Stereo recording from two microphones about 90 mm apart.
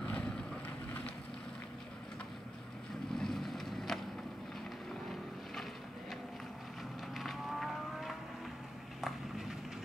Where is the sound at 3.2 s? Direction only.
Centre (ahead or behind).